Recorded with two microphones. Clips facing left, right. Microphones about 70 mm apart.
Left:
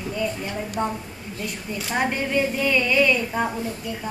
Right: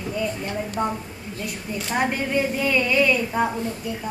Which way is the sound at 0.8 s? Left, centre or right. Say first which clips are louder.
Left 1 dB; centre.